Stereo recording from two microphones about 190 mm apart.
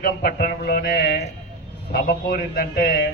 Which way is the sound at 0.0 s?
50° left (ahead or behind).